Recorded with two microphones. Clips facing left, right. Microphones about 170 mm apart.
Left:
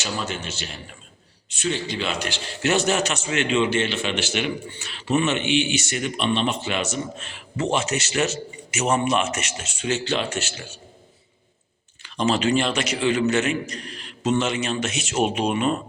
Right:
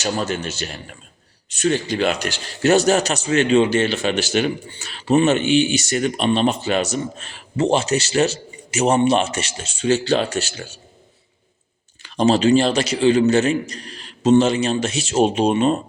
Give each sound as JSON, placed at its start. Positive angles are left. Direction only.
{"t": 0.0, "sound": "a man's voice", "side_deg": -45}
{"t": 12.0, "sound": "a man's voice", "side_deg": -35}